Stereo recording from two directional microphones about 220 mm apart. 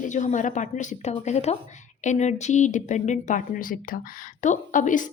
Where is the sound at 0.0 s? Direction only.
35° left (ahead or behind).